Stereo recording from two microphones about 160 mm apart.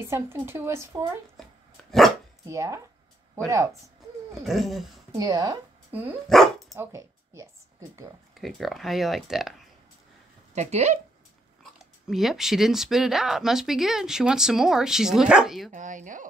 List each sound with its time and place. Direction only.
0.1 s speech: 15° right (ahead or behind)
1.9 s dog: centre (ahead or behind)
2.4 s a woman's voice: 20° right (ahead or behind)
4.5 s speech: centre (ahead or behind)
5.1 s a woman's voice: 20° right (ahead or behind)
6.2 s speech: centre (ahead or behind)
6.7 s a sound: 20° right (ahead or behind)
8.4 s speech: centre (ahead or behind)
10.5 s speech: 45° right (ahead or behind)
12.1 s speech: centre (ahead or behind)
15.7 s speech: 50° right (ahead or behind)